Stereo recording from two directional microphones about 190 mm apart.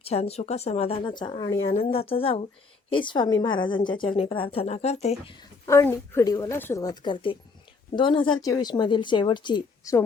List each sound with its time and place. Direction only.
0.0 s a woman's voice: 35° left (ahead or behind)
5.4 s a woman's voice: 15° left (ahead or behind)